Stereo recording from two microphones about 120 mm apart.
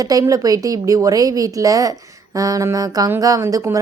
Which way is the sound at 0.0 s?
30° right (ahead or behind).